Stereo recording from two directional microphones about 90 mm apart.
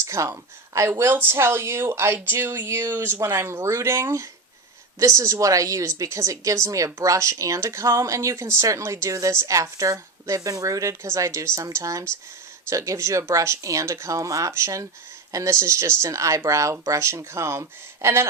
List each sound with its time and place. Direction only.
0.0 s speech: 35° right (ahead or behind)